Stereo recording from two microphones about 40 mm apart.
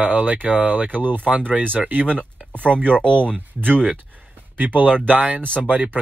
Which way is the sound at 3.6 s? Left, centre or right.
Right.